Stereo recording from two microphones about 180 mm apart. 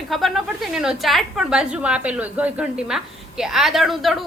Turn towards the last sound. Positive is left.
turn(degrees=0)  # may be behind; listen again after turning